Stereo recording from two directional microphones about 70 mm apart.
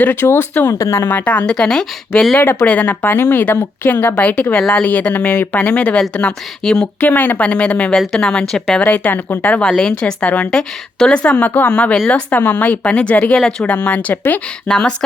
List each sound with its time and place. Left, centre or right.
0.0 s speech: left
1.2 s a woman's voice: centre
2.6 s a woman's voice: left
7.0 s a woman's voice: left
7.9 s a woman's voice: centre
8.8 s speech: left
10.5 s a woman's voice: centre
13.7 s speech: left
14.7 s a woman's voice: centre